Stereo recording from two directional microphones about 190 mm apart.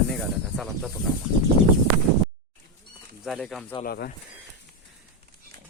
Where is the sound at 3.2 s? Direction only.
Centre (ahead or behind).